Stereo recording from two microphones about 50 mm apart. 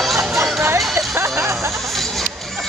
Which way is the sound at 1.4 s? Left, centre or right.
Right.